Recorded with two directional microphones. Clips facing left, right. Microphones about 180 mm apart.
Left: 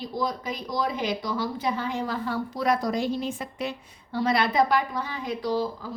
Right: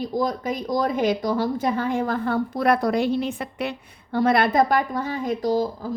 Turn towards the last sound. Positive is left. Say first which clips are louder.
# right 5 dB
turn(degrees=-45)  # may be behind; listen again after turning